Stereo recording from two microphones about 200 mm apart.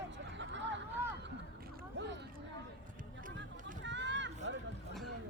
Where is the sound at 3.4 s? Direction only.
65° right (ahead or behind).